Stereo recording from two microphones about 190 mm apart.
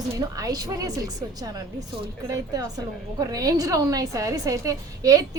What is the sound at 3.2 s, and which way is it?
A woman's voice, 20° right (ahead or behind).